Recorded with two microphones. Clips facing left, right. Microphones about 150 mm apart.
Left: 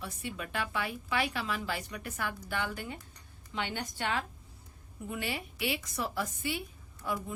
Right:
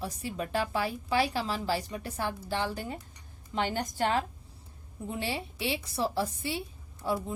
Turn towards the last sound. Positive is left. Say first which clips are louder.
# right 4 dB
turn(degrees=-30)  # may be behind; listen again after turning